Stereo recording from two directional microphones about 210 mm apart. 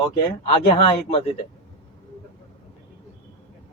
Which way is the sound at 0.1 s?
25° left (ahead or behind).